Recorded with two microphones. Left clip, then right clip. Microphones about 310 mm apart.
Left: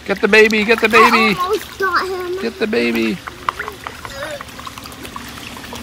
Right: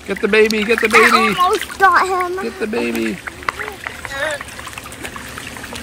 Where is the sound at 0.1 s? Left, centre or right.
Centre.